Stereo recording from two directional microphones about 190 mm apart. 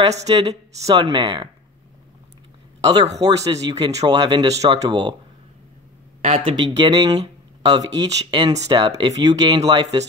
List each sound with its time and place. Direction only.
0.1 s speech: 35° right (ahead or behind)
1.0 s speech: 25° right (ahead or behind)
2.8 s speech: 20° right (ahead or behind)
6.4 s speech: 25° right (ahead or behind)